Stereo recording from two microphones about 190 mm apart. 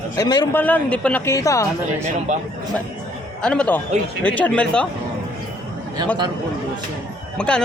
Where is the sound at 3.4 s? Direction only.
5° left (ahead or behind).